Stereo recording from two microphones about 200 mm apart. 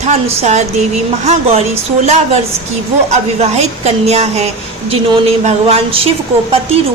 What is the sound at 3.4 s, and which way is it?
A woman's voice, 30° right (ahead or behind).